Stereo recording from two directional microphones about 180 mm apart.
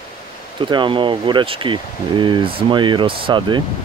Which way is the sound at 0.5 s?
25° right (ahead or behind).